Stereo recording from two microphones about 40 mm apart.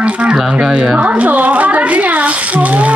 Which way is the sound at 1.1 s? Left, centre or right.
Right.